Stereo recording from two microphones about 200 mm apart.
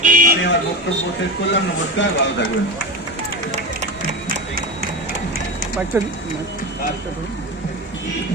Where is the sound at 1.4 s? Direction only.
65° left (ahead or behind).